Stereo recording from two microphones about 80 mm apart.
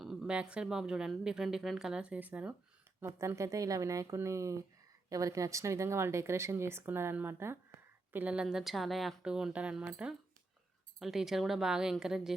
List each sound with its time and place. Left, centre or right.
0.0 s a sound: centre
0.3 s speech: centre
3.0 s speech: right
8.1 s a woman's voice: centre
9.2 s a woman's voice: centre